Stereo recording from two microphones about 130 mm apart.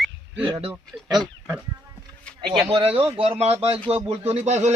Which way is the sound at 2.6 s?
45° right (ahead or behind).